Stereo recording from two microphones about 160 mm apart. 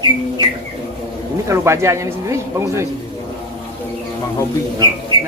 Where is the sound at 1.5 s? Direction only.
15° right (ahead or behind).